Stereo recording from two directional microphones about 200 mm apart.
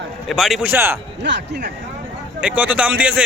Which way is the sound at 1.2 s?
60° right (ahead or behind).